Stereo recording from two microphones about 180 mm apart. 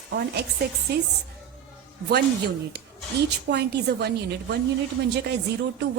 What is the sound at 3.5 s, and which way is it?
Speech, 65° right (ahead or behind).